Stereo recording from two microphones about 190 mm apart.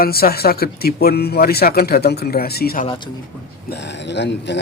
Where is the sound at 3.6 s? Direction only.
65° left (ahead or behind).